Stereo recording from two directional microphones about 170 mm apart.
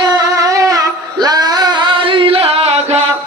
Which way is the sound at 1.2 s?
25° right (ahead or behind).